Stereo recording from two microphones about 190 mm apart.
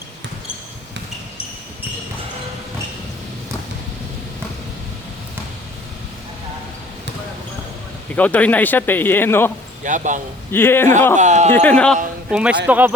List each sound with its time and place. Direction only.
8.1 s speech: 10° left (ahead or behind)
9.8 s speech: 40° right (ahead or behind)
10.5 s speech: 10° left (ahead or behind)
11.2 s speech: 40° right (ahead or behind)
11.5 s speech: 10° left (ahead or behind)
12.3 s speech: 5° right (ahead or behind)